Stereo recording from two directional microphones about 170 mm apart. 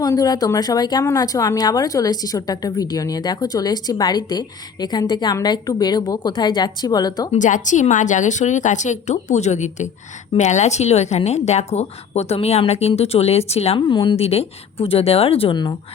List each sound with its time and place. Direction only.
0.0 s speech: 20° left (ahead or behind)
7.3 s a woman's voice: 45° left (ahead or behind); by 15.7 s 30° left (ahead or behind)